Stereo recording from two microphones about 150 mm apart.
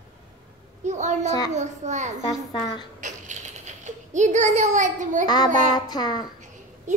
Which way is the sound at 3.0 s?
50° right (ahead or behind).